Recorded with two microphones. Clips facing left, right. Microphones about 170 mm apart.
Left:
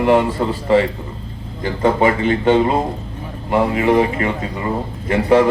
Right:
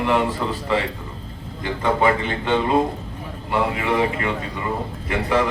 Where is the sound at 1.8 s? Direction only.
40° left (ahead or behind).